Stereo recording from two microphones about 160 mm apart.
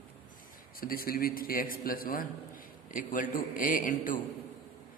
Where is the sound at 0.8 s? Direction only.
65° left (ahead or behind).